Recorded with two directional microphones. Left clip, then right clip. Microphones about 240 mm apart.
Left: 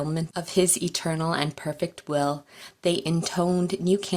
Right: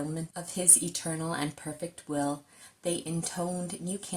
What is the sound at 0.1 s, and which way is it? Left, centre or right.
Speech, left.